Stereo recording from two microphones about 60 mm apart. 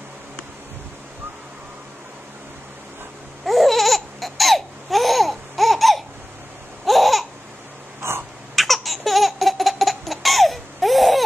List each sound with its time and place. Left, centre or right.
3.4 s laughter: centre
8.0 s a sound: right
8.5 s laughter: centre